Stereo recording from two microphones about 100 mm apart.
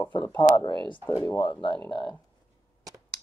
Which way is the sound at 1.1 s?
25° left (ahead or behind).